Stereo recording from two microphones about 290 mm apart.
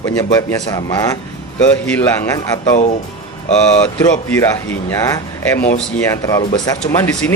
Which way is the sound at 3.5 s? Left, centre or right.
Left.